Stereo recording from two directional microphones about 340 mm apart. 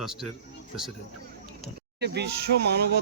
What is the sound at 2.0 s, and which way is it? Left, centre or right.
Speech, right.